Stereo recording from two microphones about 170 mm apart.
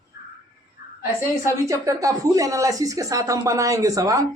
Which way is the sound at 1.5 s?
20° right (ahead or behind).